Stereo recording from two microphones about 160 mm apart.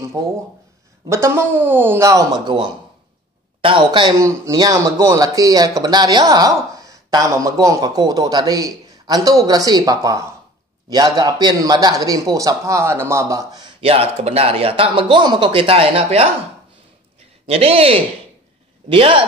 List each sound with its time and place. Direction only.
0.2 s speech: 25° right (ahead or behind)
4.2 s speech: 20° right (ahead or behind); by 16.3 s 40° right (ahead or behind)
17.5 s speech: 35° right (ahead or behind)